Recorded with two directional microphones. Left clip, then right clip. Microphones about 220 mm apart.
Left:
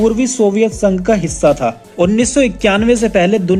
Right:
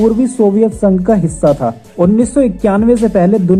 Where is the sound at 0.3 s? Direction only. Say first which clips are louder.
Right 2 dB; 30° left (ahead or behind).